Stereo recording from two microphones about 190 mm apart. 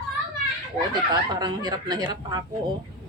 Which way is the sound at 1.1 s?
20° right (ahead or behind).